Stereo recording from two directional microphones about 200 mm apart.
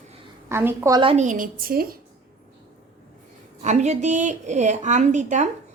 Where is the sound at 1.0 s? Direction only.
35° right (ahead or behind).